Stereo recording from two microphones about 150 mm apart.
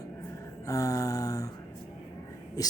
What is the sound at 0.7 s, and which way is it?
Mantra, 20° left (ahead or behind).